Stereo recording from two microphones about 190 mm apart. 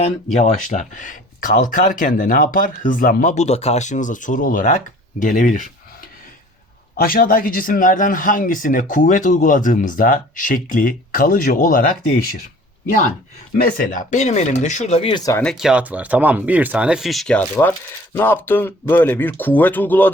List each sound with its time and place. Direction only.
0.3 s speech: 40° left (ahead or behind)
6.9 s speech: 50° left (ahead or behind)
13.6 s speech: 45° left (ahead or behind); by 15.4 s 15° left (ahead or behind)
15.4 s speech: 5° right (ahead or behind)